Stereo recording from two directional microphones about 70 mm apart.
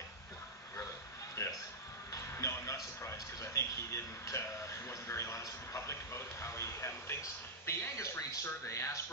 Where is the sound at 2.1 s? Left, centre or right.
Left.